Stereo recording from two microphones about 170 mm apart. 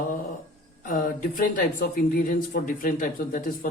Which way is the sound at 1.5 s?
55° left (ahead or behind).